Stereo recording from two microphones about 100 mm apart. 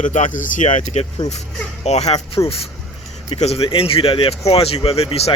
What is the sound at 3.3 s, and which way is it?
Speech, 85° left.